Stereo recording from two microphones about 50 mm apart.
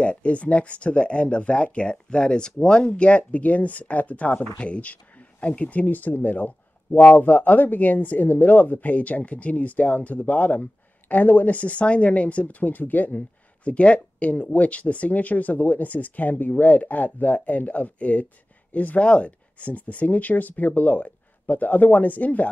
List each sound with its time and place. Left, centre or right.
0.0 s speech: left
13.7 s speech: left